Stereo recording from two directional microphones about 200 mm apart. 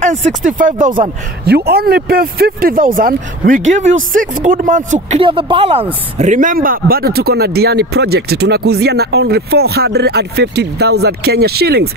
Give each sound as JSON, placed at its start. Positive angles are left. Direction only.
{"t": 0.0, "sound": "speech", "side_deg": -35}
{"t": 1.4, "sound": "speech", "side_deg": -50}
{"t": 5.2, "sound": "speech", "side_deg": -25}